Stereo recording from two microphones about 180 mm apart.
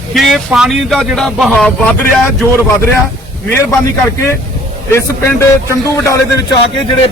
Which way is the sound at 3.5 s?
15° left (ahead or behind).